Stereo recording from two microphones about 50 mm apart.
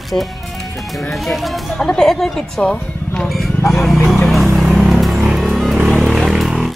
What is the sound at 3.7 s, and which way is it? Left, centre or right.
Speech, centre.